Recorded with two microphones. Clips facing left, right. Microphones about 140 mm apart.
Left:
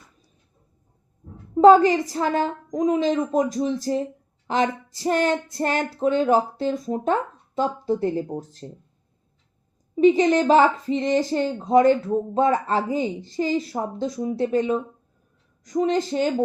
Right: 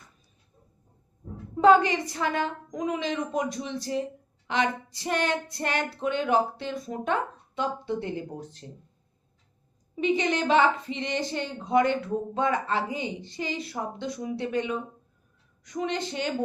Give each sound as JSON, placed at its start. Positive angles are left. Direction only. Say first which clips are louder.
{"t": 1.5, "sound": "a woman's voice", "louder": "left 6 dB", "side_deg": 40}
{"t": 9.9, "sound": "a woman's voice", "louder": "left 9 dB", "side_deg": 40}